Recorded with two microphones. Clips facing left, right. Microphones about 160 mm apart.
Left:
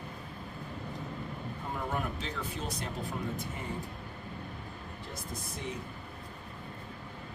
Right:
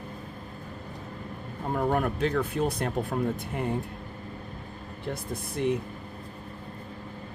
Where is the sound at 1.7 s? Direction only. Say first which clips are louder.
Right 10 dB; 55° right (ahead or behind).